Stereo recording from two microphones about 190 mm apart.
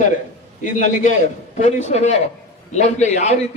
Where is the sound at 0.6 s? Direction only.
40° left (ahead or behind).